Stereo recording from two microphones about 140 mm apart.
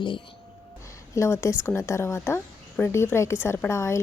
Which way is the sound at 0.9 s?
20° left (ahead or behind).